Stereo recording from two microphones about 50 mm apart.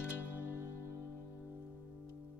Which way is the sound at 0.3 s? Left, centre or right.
Right.